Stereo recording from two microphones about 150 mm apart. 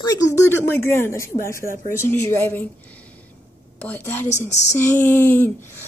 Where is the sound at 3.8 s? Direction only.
10° left (ahead or behind).